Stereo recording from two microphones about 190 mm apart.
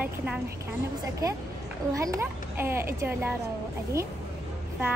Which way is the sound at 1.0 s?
15° right (ahead or behind).